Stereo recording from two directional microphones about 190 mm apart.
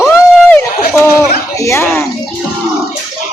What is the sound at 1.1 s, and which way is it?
Speech, 15° left (ahead or behind).